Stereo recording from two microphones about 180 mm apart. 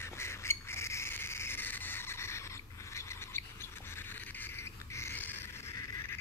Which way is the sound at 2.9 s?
15° left (ahead or behind).